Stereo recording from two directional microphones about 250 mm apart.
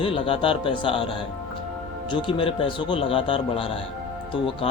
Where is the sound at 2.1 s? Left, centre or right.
Left.